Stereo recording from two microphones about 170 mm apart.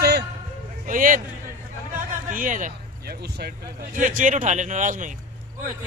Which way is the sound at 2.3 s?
50° right (ahead or behind).